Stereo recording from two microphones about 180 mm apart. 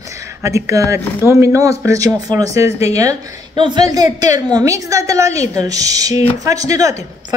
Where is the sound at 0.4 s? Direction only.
15° right (ahead or behind).